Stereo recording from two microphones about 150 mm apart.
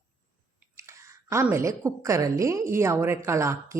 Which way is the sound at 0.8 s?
20° right (ahead or behind).